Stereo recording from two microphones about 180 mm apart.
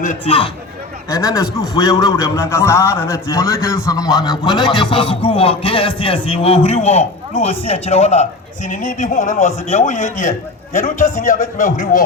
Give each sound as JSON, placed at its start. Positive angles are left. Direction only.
{"t": 0.0, "sound": "a man's voice", "side_deg": 45}
{"t": 1.1, "sound": "a man's voice", "side_deg": 20}